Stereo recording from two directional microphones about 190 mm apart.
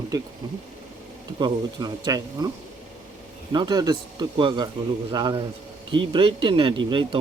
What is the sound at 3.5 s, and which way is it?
Speech, 20° right (ahead or behind).